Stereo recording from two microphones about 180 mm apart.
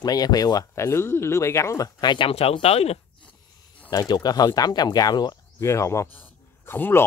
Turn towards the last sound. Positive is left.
turn(degrees=10)  # may be behind; listen again after turning